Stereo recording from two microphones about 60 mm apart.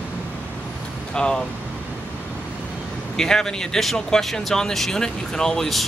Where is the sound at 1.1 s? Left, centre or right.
Centre.